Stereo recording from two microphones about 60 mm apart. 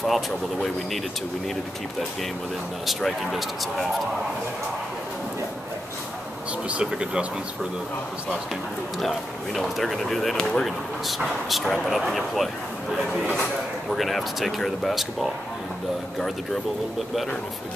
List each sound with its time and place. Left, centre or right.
0.0 s speech: centre
2.9 s speech: centre
6.7 s speech: centre
9.0 s speech: centre
10.3 s speech: centre
11.1 s speech: centre